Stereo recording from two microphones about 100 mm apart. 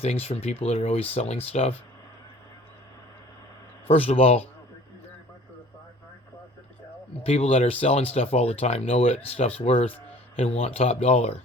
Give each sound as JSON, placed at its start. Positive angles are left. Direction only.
{"t": 0.0, "sound": "speech", "side_deg": 90}
{"t": 3.8, "sound": "speech", "side_deg": 80}
{"t": 7.3, "sound": "speech", "side_deg": 85}
{"t": 10.3, "sound": "speech", "side_deg": 90}